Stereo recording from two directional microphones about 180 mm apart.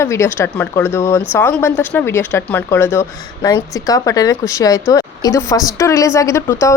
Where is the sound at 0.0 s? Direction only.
15° left (ahead or behind).